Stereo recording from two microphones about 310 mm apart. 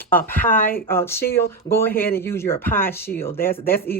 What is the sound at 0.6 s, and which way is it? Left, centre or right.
Speech, left.